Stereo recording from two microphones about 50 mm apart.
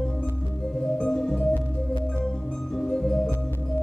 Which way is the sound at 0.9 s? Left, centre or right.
Centre.